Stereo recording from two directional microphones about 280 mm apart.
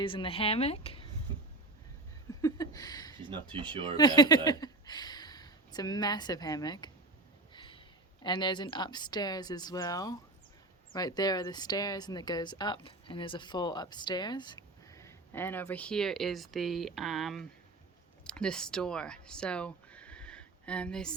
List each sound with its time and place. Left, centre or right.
0.0 s speech: centre
2.4 s a sound: centre
3.5 s speech: centre
3.9 s speech: centre
7.5 s a sound: centre
8.2 s speech: centre